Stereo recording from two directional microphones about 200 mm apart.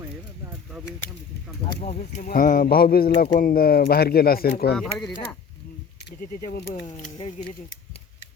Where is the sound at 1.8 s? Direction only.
35° left (ahead or behind).